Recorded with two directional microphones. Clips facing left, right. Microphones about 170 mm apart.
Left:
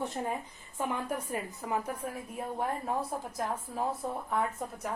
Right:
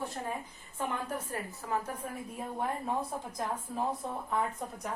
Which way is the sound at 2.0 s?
5° left (ahead or behind).